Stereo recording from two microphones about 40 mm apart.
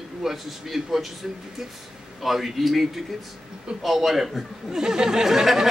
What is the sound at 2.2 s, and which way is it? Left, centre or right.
A man's voice, centre.